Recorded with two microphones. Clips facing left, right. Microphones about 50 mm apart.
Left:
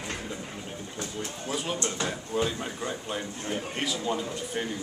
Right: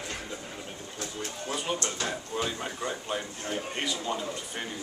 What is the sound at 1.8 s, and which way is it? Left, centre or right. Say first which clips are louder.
Speech: left 2 dB; centre.